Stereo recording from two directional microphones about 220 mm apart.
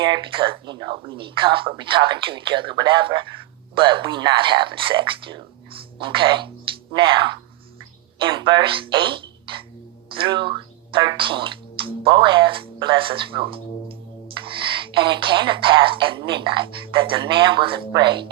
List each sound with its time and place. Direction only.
0.0 s speech: 20° right (ahead or behind)